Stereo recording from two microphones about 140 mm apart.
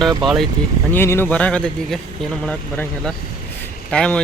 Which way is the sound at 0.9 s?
15° left (ahead or behind).